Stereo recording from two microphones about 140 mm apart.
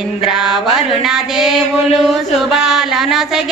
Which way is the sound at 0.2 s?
5° right (ahead or behind).